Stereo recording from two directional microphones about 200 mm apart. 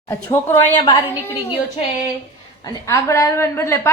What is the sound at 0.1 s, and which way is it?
Speech, 15° left (ahead or behind).